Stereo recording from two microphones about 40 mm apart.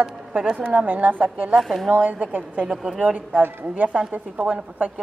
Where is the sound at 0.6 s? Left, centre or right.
Right.